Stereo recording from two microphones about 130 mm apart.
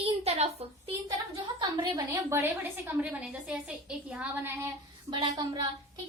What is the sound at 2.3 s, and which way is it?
A woman's voice, 15° right (ahead or behind).